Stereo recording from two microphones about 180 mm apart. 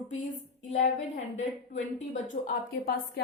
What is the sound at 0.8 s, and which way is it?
A woman's voice, 40° left (ahead or behind).